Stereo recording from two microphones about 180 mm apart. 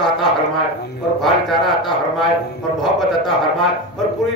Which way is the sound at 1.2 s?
Centre (ahead or behind).